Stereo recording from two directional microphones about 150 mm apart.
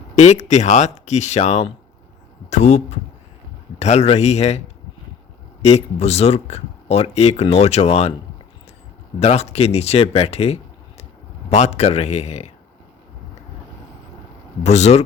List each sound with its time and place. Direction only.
0.2 s speech: 50° left (ahead or behind)
5.6 s speech: 45° left (ahead or behind)
9.2 s speech: 45° left (ahead or behind)
14.6 s speech: 45° left (ahead or behind)